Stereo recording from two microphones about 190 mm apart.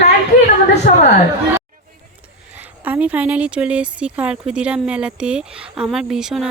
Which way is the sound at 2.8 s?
10° right (ahead or behind).